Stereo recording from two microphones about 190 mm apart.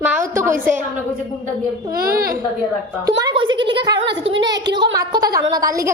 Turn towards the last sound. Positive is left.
turn(degrees=-15)  # may be behind; listen again after turning